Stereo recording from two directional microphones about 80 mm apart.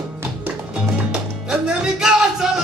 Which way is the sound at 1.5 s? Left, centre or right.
Centre.